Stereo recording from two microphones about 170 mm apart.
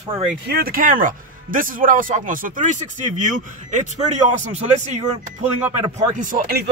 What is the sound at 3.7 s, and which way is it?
Speech, 45° right (ahead or behind).